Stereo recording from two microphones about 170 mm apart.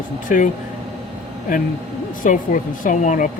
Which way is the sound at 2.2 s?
50° left (ahead or behind).